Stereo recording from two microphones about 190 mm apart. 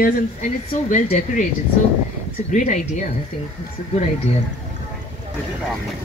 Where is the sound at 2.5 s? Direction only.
40° left (ahead or behind).